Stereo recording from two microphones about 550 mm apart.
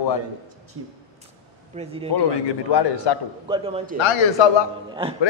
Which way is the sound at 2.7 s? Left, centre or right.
Left.